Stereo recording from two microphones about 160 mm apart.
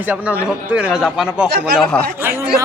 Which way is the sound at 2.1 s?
15° right (ahead or behind).